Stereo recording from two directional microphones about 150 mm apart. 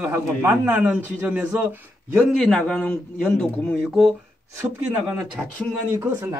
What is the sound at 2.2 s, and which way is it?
A man's voice, 5° left (ahead or behind).